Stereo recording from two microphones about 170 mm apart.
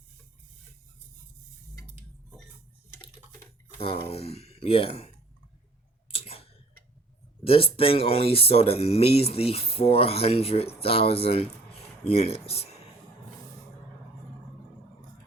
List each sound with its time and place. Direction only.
3.8 s speech: 35° left (ahead or behind)
6.1 s a sound: 35° left (ahead or behind)
7.4 s speech: 35° left (ahead or behind)